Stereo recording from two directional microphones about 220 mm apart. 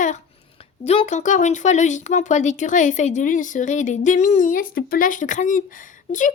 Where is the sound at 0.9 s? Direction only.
30° left (ahead or behind).